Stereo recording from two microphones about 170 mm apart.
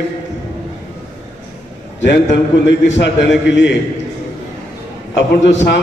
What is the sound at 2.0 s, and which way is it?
A man's voice, 90° left.